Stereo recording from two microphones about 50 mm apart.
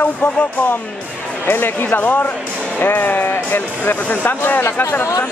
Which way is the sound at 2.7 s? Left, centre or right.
Left.